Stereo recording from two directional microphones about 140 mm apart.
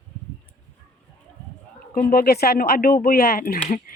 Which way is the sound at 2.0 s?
90° left.